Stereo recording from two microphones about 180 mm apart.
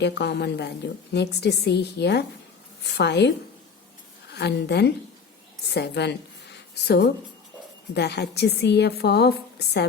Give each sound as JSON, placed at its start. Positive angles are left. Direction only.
{"t": 0.0, "sound": "a woman's voice", "side_deg": 70}